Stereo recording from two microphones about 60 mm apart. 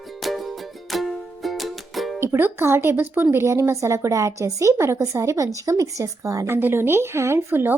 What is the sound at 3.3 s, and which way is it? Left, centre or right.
A woman's voice, right.